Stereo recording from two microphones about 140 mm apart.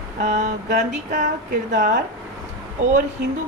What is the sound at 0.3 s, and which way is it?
Mantra, 60° right (ahead or behind).